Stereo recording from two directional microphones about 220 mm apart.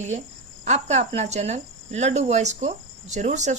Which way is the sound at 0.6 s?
30° right (ahead or behind).